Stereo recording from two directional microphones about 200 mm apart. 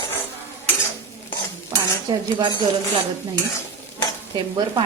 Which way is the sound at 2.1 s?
20° right (ahead or behind).